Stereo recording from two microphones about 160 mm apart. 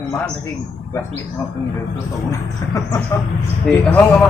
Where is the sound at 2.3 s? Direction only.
20° left (ahead or behind).